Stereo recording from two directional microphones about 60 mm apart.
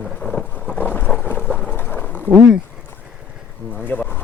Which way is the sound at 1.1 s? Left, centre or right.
Centre.